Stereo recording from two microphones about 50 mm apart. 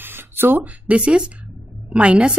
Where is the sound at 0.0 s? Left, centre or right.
Right.